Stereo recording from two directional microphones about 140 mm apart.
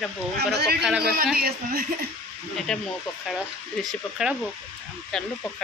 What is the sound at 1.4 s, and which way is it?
Speech, 90° right.